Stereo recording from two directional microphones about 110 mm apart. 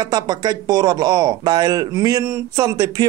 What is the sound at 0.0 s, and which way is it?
Speech, 40° right (ahead or behind).